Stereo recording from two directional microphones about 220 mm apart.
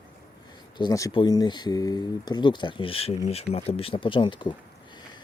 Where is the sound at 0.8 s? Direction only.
15° left (ahead or behind).